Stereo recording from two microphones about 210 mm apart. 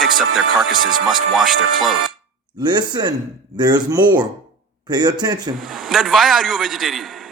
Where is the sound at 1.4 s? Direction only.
Centre (ahead or behind).